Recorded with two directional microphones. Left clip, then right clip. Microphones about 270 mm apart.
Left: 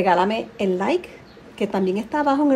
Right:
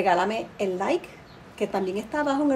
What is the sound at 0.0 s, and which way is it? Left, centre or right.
A woman's voice, left.